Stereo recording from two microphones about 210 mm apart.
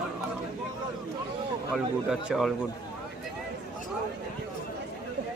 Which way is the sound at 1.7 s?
Centre (ahead or behind).